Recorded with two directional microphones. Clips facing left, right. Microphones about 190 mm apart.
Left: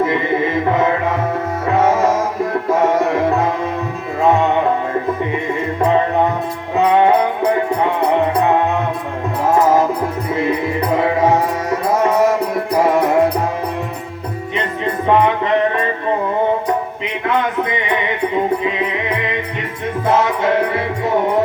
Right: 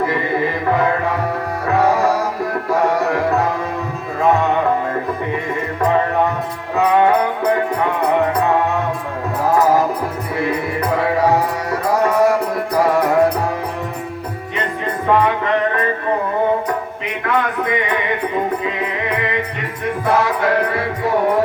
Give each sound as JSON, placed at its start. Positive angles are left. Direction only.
{"t": 0.0, "sound": "music", "side_deg": 20}
{"t": 6.7, "sound": "music", "side_deg": 20}
{"t": 11.2, "sound": "music", "side_deg": 20}
{"t": 15.0, "sound": "music", "side_deg": 20}
{"t": 17.2, "sound": "a sound", "side_deg": 20}
{"t": 20.1, "sound": "music", "side_deg": 20}